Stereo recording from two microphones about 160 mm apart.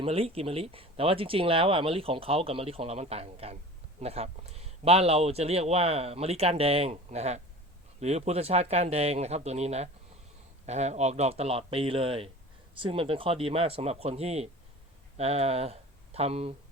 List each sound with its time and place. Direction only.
0.0 s speech: 40° right (ahead or behind)